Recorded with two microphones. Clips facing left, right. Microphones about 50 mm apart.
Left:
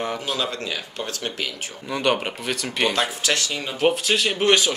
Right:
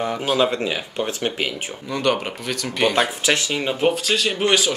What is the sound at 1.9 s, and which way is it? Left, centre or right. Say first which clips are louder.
Speech: right 1 dB; centre.